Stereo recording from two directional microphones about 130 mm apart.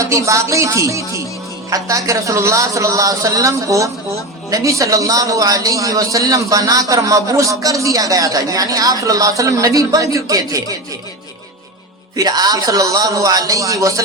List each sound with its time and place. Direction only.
0.0 s a man's voice: 25° right (ahead or behind)
12.1 s a man's voice: 30° right (ahead or behind)